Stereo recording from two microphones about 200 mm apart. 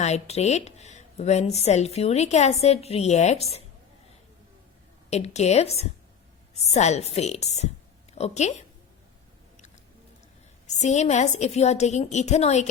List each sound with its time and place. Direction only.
0.0 s speech: 35° left (ahead or behind)
5.1 s speech: 35° left (ahead or behind)
10.7 s speech: 35° left (ahead or behind)